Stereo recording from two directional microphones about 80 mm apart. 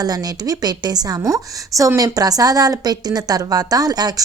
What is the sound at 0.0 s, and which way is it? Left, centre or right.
A woman's voice, right.